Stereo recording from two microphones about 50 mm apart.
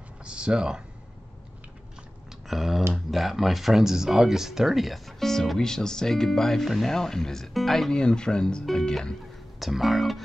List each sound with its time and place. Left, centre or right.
0.2 s speech: centre
2.4 s speech: centre
7.9 s speech: centre
9.6 s speech: centre